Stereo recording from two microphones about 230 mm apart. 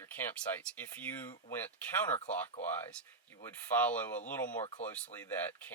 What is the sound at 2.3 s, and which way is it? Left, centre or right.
Speech, centre.